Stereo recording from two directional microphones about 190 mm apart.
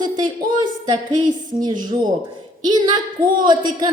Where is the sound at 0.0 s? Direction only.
20° right (ahead or behind).